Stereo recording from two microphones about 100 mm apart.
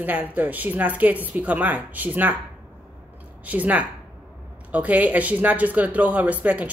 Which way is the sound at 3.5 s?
15° right (ahead or behind).